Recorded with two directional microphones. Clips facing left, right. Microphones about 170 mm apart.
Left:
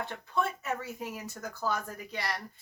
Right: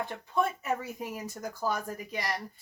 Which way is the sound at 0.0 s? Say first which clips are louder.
Right 2 dB; 15° right (ahead or behind).